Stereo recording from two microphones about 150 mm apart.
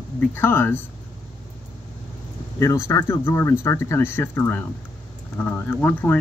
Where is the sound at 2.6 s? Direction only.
20° left (ahead or behind).